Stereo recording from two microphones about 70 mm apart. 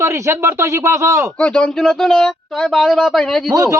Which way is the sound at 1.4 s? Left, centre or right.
Centre.